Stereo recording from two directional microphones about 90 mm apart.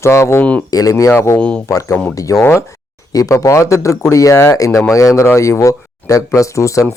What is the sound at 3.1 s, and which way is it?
Speech, 40° left (ahead or behind).